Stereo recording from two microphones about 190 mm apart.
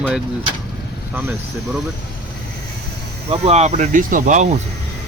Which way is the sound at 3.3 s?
35° right (ahead or behind).